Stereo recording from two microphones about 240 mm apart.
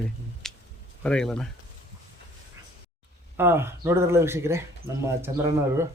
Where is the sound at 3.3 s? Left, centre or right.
Centre.